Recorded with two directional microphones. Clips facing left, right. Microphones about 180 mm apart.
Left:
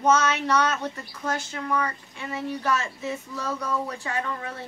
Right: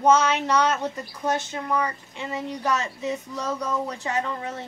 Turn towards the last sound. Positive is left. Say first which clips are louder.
# right 3 dB
turn(degrees=-20)  # may be behind; listen again after turning